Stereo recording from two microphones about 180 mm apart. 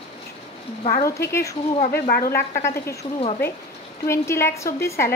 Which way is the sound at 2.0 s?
55° left (ahead or behind).